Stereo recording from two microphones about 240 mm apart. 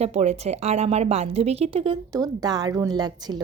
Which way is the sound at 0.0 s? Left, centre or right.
Right.